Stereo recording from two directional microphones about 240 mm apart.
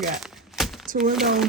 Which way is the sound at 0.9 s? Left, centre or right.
Right.